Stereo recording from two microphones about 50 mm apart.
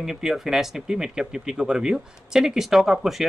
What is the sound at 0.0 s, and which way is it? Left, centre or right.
A man's voice, centre.